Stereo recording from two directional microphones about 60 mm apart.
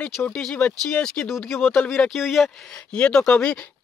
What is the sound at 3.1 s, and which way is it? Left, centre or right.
Speech, centre.